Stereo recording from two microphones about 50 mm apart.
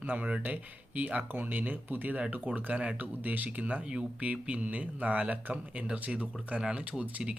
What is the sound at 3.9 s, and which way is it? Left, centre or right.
Speech, right.